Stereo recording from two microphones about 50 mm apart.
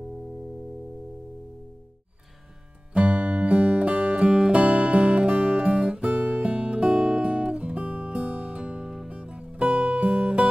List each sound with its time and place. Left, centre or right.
2.9 s music: right
9.1 s music: right
9.9 s guitar: right